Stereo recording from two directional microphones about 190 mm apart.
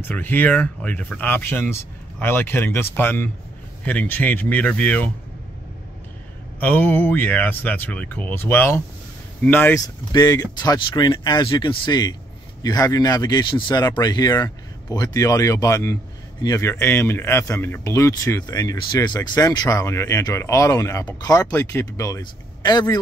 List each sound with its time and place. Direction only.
0.0 s speech: 10° left (ahead or behind)
6.6 s speech: 10° left (ahead or behind)